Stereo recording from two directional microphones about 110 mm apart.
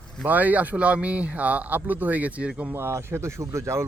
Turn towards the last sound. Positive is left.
turn(degrees=-25)  # may be behind; listen again after turning